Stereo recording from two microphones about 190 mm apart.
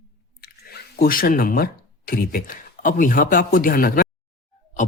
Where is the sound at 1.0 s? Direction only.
50° left (ahead or behind).